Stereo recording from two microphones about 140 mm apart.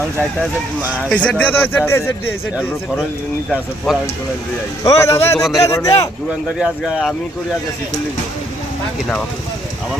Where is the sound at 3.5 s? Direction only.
Centre (ahead or behind).